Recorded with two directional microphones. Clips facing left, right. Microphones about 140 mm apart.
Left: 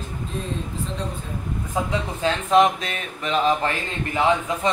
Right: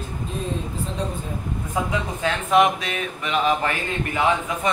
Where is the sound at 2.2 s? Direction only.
35° left (ahead or behind).